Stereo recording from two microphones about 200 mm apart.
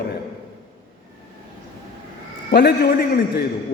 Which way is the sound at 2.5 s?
55° left (ahead or behind).